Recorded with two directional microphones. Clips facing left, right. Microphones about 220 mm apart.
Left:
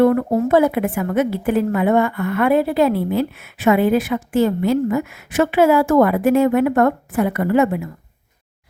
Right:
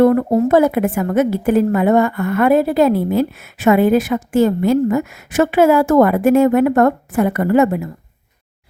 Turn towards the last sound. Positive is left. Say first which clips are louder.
# right 3 dB
turn(degrees=-45)  # may be behind; listen again after turning